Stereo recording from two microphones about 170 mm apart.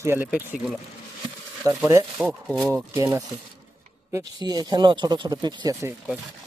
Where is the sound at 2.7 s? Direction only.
15° right (ahead or behind).